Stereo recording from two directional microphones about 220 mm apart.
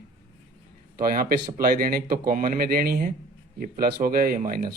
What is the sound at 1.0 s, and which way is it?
A man's voice, 40° right (ahead or behind).